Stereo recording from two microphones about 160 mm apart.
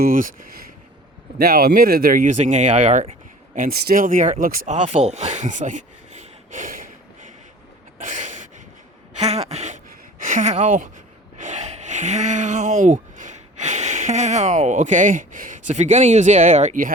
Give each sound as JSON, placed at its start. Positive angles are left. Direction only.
{"t": 0.0, "sound": "speech", "side_deg": -60}
{"t": 1.4, "sound": "speech", "side_deg": -70}
{"t": 3.5, "sound": "speech", "side_deg": -65}
{"t": 8.0, "sound": "a sound", "side_deg": -50}
{"t": 11.3, "sound": "speech", "side_deg": -45}